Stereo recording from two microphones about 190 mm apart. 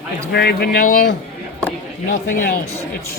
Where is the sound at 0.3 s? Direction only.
55° left (ahead or behind).